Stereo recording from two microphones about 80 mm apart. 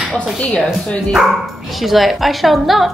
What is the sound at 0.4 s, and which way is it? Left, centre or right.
Speech, centre.